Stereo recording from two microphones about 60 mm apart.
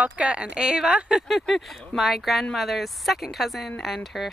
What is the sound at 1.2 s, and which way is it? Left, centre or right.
Speech, centre.